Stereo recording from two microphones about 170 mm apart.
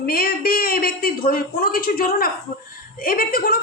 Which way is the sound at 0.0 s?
60° left (ahead or behind).